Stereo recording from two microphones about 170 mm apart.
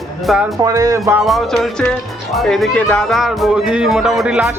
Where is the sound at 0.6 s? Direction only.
20° right (ahead or behind).